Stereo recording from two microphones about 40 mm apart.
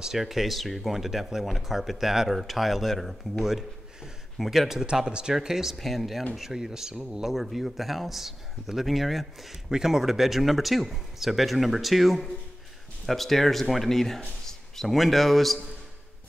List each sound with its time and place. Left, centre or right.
0.0 s speech: centre
3.4 s a sound: centre
5.0 s speech: right
5.3 s speech: centre
5.8 s speech: centre
7.2 s speech: centre
9.7 s a man's voice: centre